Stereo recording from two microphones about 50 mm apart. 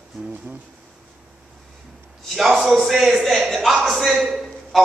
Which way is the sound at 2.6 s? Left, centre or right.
Centre.